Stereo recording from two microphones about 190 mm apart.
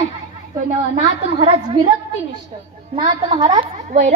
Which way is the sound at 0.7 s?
30° right (ahead or behind).